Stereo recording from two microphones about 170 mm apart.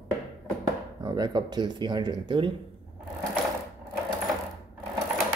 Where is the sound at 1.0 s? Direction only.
20° right (ahead or behind).